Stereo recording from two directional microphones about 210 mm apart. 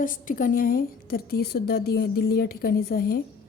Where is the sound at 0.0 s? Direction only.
40° left (ahead or behind).